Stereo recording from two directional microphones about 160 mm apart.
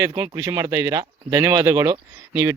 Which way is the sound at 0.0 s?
20° right (ahead or behind).